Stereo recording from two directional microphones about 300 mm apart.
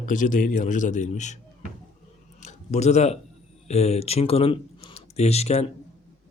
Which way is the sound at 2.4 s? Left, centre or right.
Left.